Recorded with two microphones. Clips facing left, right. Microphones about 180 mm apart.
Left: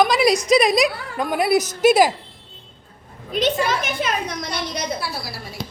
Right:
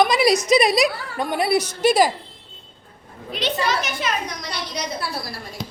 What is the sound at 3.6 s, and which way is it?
A woman's voice, 50° left (ahead or behind).